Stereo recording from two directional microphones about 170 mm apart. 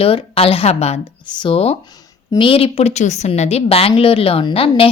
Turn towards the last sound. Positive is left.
turn(degrees=35)  # may be behind; listen again after turning